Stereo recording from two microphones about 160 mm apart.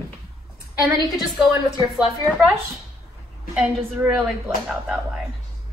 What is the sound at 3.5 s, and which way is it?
A woman's voice, 5° right (ahead or behind).